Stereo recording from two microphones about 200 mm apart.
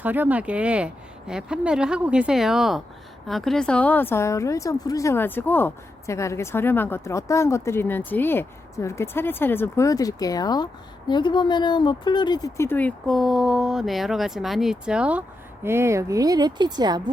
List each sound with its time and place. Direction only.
0.0 s a woman's voice: 10° right (ahead or behind)